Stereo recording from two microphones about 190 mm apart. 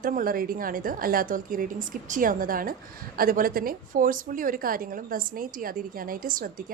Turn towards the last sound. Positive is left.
turn(degrees=-45)  # may be behind; listen again after turning